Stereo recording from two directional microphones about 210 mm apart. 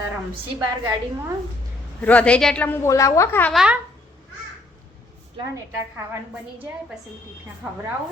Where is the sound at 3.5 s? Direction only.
5° right (ahead or behind).